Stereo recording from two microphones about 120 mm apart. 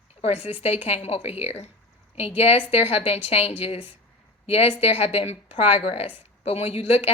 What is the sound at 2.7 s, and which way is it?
Speech, 60° left (ahead or behind).